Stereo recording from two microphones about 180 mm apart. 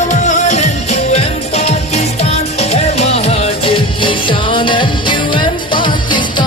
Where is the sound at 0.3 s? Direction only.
40° left (ahead or behind).